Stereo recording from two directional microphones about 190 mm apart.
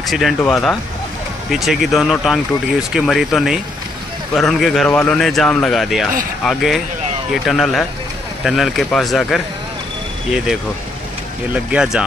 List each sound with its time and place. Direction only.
0.1 s speech: centre (ahead or behind)
11.5 s speech: 5° right (ahead or behind)